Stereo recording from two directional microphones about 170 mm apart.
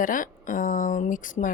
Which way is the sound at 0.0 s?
50° left (ahead or behind).